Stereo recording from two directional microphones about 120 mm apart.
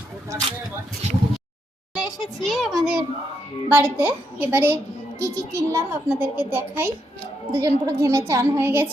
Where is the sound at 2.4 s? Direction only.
Centre (ahead or behind).